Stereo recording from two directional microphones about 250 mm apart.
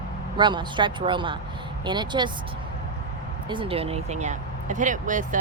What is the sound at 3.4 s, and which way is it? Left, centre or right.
Speech, centre.